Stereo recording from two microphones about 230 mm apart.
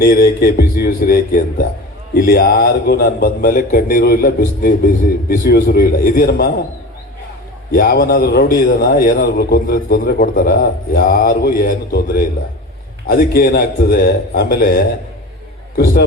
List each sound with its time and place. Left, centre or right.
0.0 s a man's voice: left
7.7 s a man's voice: left